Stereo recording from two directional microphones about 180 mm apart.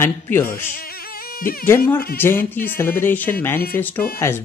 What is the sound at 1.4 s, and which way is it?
Speech, 55° left (ahead or behind).